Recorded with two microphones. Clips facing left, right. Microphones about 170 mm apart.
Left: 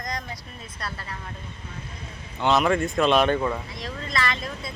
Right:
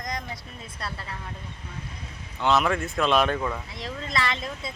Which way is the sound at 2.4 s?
Centre (ahead or behind).